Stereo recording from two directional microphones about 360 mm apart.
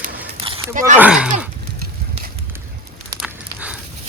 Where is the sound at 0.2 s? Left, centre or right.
Centre.